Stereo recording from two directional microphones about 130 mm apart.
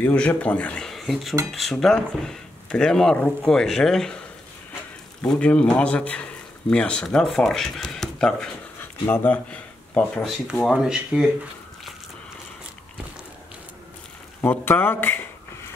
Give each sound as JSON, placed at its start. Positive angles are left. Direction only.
{"t": 0.0, "sound": "speech", "side_deg": 10}
{"t": 5.2, "sound": "speech", "side_deg": 10}
{"t": 10.6, "sound": "speech", "side_deg": -5}
{"t": 14.4, "sound": "speech", "side_deg": 15}